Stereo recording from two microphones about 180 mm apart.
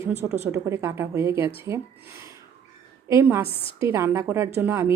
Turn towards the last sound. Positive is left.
turn(degrees=-15)  # may be behind; listen again after turning